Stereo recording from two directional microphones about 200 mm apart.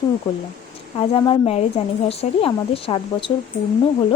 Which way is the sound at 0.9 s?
25° left (ahead or behind).